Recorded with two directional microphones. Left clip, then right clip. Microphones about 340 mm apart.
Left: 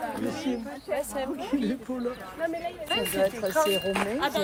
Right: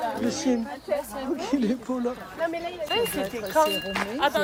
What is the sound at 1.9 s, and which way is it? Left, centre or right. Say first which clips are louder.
Speech: right 4 dB; centre.